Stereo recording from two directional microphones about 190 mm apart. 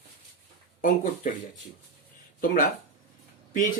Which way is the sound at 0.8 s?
45° left (ahead or behind).